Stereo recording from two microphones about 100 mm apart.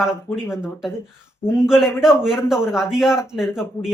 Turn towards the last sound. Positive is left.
turn(degrees=-5)  # may be behind; listen again after turning